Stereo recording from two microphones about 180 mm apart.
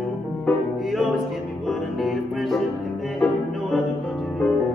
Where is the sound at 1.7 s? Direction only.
Centre (ahead or behind).